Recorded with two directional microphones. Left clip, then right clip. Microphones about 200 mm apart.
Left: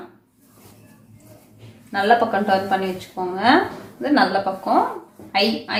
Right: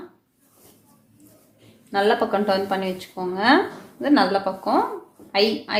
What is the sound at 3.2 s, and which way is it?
Speech, 40° right (ahead or behind).